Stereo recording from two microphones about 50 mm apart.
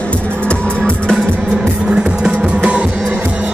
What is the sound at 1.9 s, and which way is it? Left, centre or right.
Music, centre.